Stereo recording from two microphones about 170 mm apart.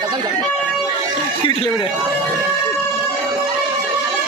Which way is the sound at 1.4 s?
30° left (ahead or behind).